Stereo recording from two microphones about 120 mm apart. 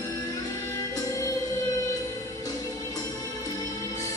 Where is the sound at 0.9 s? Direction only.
30° left (ahead or behind).